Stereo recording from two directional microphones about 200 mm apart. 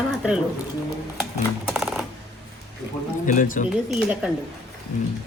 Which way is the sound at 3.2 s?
40° left (ahead or behind).